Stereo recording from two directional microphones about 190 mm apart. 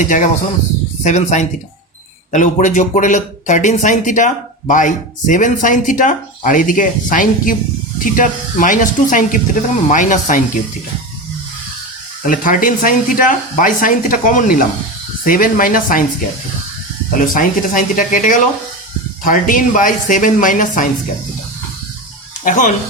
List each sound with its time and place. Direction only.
0.0 s speech: 40° left (ahead or behind)
12.2 s speech: 45° left (ahead or behind)
17.2 s speech: 45° left (ahead or behind)
22.4 s speech: 45° left (ahead or behind)